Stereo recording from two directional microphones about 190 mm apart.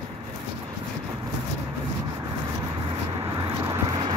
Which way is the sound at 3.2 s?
20° right (ahead or behind).